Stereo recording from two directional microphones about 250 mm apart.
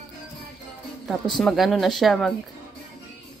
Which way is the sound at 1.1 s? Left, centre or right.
Centre.